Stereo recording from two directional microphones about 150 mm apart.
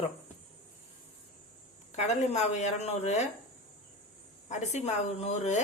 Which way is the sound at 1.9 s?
50° left (ahead or behind).